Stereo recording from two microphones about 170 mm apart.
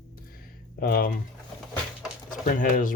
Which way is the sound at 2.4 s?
50° left (ahead or behind).